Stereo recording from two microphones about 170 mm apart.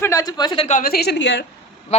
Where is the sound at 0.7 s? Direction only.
55° left (ahead or behind); by 1.4 s 90° left.